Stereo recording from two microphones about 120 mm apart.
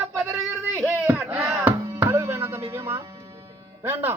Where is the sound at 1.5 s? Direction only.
25° right (ahead or behind).